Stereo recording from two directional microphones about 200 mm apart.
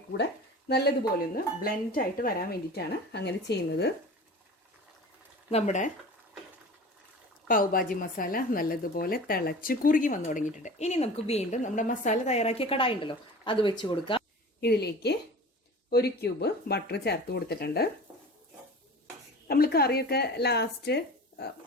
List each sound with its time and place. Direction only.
0.7 s speech: 50° left (ahead or behind)
5.5 s a woman's voice: 35° left (ahead or behind)
7.4 s a woman's voice: 45° left (ahead or behind); by 14.2 s 25° left (ahead or behind)
14.6 s a woman's voice: 55° left (ahead or behind)
19.5 s speech: 50° left (ahead or behind)